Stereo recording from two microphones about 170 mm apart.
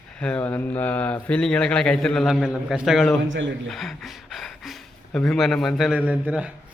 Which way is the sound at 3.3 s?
90° right.